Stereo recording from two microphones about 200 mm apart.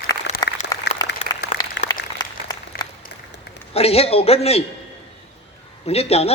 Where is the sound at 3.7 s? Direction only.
30° left (ahead or behind).